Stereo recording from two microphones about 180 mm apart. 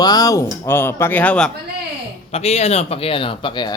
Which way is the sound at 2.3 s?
35° left (ahead or behind).